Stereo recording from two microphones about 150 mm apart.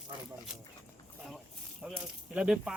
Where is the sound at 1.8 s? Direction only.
Centre (ahead or behind).